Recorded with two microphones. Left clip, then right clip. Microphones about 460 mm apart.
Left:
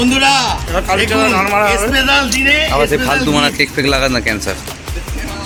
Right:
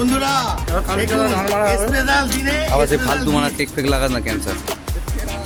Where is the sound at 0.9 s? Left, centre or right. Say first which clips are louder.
Left 6 dB; right.